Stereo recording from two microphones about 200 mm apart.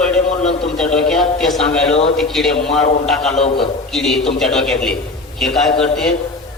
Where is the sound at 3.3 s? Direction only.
30° left (ahead or behind).